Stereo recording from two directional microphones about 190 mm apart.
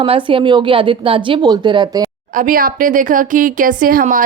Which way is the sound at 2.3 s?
45° right (ahead or behind).